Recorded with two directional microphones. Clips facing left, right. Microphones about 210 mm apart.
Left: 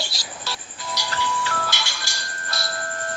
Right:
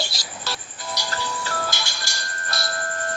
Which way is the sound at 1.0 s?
40° right (ahead or behind).